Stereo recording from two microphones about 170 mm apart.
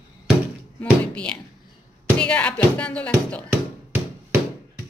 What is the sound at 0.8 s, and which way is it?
Speech, 5° left (ahead or behind).